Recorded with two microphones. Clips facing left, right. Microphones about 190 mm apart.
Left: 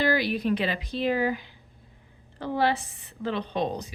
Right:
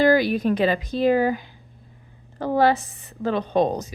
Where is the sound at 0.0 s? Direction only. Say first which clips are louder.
Right 7 dB; 45° right (ahead or behind).